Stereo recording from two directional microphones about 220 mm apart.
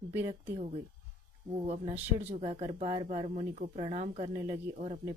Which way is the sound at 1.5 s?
25° right (ahead or behind).